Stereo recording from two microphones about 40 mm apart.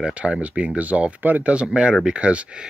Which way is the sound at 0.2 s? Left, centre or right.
Right.